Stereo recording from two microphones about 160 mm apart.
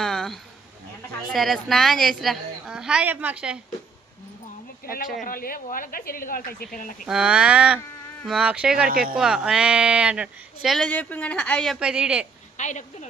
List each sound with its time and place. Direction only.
0.0 s a sound: centre (ahead or behind)
1.3 s speech: centre (ahead or behind)
5.2 s speech: 65° left (ahead or behind)
7.0 s a sound: 5° right (ahead or behind)
8.3 s speech: 5° right (ahead or behind)
8.9 s speech: 65° right (ahead or behind)
9.1 s speech: 5° right (ahead or behind)
12.5 s a woman's voice: 50° left (ahead or behind)